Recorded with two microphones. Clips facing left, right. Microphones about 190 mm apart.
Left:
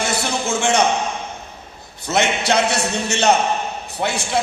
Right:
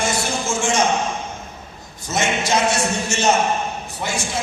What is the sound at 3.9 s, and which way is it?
Speech, 65° left (ahead or behind).